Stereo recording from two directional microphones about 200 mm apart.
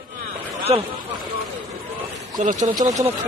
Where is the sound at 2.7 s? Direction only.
20° right (ahead or behind).